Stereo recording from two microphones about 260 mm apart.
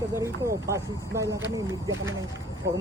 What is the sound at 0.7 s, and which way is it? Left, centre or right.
Speech, centre.